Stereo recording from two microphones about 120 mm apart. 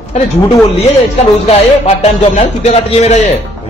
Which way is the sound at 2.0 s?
60° left (ahead or behind).